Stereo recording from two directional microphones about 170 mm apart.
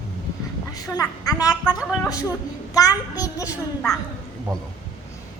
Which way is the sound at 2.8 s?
20° left (ahead or behind).